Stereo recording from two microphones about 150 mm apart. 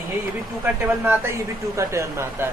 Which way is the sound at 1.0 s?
20° right (ahead or behind).